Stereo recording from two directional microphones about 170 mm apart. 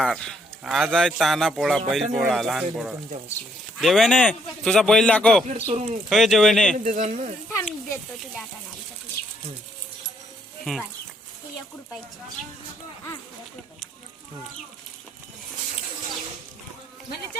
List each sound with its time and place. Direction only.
0.0 s speech: centre (ahead or behind)
5.5 s speech: 40° right (ahead or behind)
6.1 s speech: centre (ahead or behind)
6.8 s speech: 50° right (ahead or behind)
10.6 s speech: centre (ahead or behind)